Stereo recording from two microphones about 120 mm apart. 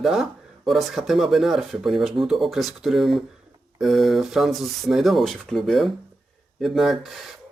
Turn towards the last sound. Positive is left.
turn(degrees=0)  # may be behind; listen again after turning